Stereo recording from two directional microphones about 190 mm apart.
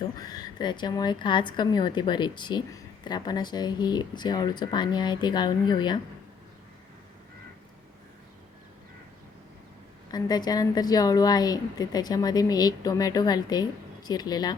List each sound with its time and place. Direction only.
0.2 s a woman's voice: 20° left (ahead or behind)
10.1 s a woman's voice: 20° left (ahead or behind)